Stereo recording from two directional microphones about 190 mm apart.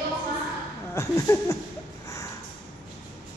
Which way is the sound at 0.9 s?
15° left (ahead or behind).